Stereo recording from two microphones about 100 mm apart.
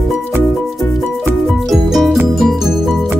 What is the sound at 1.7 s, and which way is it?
Music, centre (ahead or behind).